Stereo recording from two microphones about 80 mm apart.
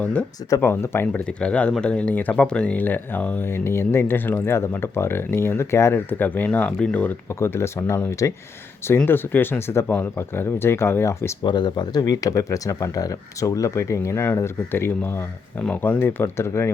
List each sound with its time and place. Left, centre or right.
0.0 s speech: centre
0.6 s speech: left
1.2 s speech: centre
7.3 s speech: left
11.4 s speech: left